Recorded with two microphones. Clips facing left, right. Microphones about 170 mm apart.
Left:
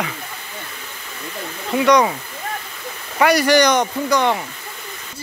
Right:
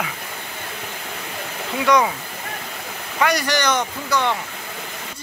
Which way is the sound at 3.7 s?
55° left (ahead or behind).